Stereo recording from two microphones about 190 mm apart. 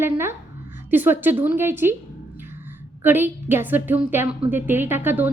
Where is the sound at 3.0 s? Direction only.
10° right (ahead or behind).